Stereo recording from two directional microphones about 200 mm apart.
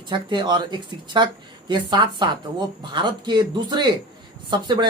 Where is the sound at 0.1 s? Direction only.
25° right (ahead or behind).